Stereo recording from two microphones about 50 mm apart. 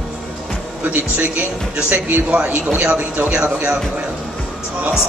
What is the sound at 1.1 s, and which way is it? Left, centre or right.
A man's voice, right.